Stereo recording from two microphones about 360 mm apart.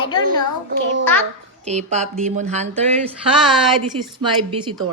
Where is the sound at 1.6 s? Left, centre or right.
Centre.